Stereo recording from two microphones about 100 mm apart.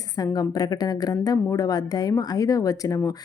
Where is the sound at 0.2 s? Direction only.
40° left (ahead or behind).